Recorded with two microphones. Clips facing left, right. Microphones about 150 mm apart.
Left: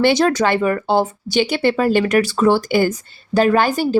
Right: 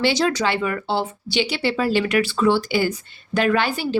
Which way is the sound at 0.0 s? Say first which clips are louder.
Left 5 dB; 50° left (ahead or behind).